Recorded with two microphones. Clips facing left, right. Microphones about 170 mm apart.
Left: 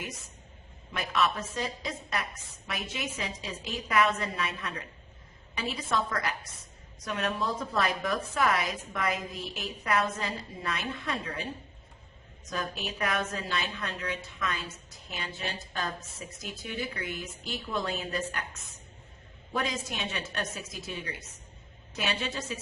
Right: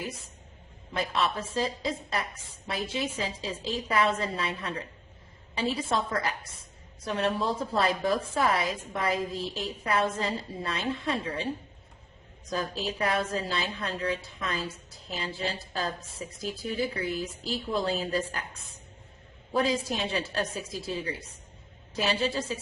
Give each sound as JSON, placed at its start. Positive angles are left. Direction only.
{"t": 0.0, "sound": "a woman's voice", "side_deg": -30}
{"t": 12.5, "sound": "a woman's voice", "side_deg": -35}